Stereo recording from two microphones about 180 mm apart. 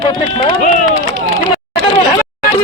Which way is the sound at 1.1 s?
90° right.